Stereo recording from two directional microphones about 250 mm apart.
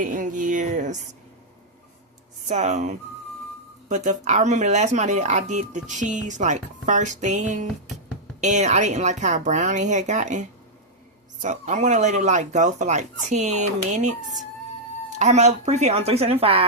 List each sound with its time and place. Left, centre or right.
0.0 s speech: right
2.5 s speech: right
11.4 s speech: right
15.2 s speech: right